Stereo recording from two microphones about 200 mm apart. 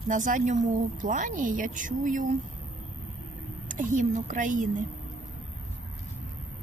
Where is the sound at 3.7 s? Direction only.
40° right (ahead or behind).